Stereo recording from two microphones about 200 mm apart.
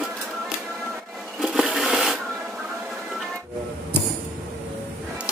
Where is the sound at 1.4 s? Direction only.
Centre (ahead or behind).